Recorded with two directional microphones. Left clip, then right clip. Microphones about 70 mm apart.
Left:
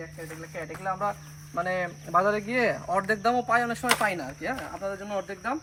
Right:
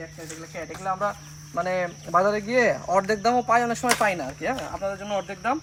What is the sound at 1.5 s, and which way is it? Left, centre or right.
A man's voice, right.